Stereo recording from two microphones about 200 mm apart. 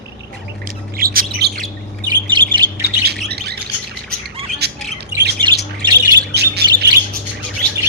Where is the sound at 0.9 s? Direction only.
45° right (ahead or behind).